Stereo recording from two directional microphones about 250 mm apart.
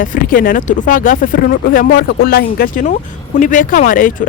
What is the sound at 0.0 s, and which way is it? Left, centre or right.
Speech, left.